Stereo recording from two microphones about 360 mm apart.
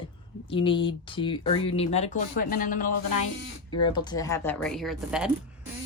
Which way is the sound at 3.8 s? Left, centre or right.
Centre.